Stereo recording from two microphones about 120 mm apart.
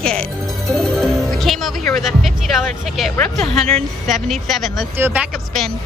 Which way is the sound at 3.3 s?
5° left (ahead or behind).